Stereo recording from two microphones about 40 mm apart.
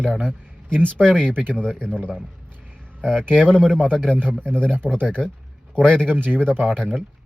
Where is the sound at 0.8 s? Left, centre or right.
Right.